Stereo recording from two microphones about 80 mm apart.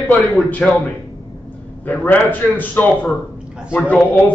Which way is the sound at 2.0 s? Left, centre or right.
Left.